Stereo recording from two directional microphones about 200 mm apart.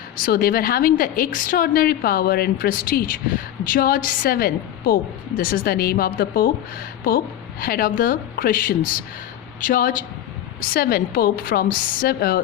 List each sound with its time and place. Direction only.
0.2 s a woman's voice: 45° left (ahead or behind)
7.6 s a woman's voice: 45° left (ahead or behind)